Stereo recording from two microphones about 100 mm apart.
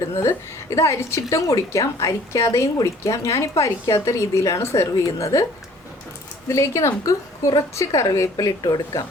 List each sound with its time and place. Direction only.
0.1 s a woman's voice: 30° left (ahead or behind)
6.5 s a woman's voice: 30° left (ahead or behind)